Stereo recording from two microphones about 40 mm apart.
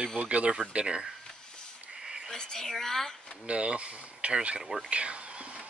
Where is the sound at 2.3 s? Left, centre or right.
Centre.